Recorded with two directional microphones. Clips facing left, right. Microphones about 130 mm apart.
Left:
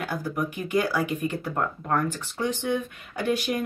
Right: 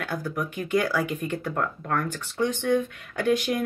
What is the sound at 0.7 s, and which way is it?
Speech, 15° left (ahead or behind).